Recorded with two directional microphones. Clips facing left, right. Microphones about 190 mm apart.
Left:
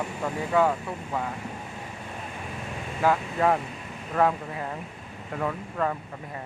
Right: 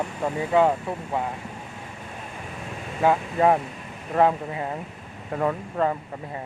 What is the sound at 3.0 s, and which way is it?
Speech, 25° right (ahead or behind).